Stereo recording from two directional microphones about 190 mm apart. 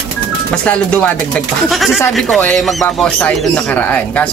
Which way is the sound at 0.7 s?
5° left (ahead or behind).